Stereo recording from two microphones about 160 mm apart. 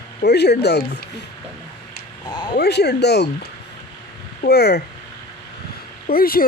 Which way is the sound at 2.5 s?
90° left.